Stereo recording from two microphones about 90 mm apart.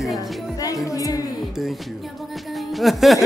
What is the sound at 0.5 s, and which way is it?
Speech, 40° left (ahead or behind).